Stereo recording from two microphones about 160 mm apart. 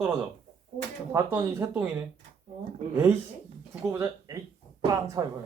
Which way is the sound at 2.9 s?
15° right (ahead or behind).